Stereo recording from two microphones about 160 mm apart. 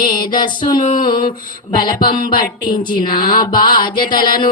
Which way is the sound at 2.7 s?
30° left (ahead or behind).